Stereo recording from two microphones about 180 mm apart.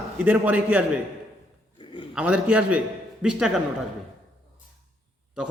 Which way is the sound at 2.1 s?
5° right (ahead or behind).